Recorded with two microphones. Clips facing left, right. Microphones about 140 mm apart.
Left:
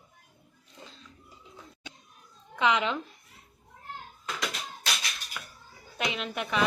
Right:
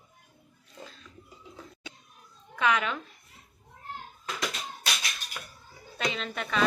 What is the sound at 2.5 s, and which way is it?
Speech, 20° left (ahead or behind).